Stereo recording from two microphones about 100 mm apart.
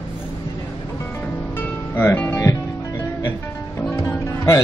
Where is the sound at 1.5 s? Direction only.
20° left (ahead or behind).